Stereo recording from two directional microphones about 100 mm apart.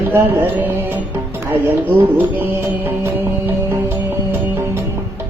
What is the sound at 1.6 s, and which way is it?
Music, 20° right (ahead or behind).